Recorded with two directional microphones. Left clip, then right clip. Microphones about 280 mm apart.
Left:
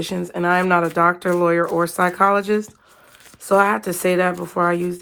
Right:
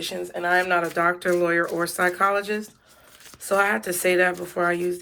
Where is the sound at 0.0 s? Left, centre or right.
Left.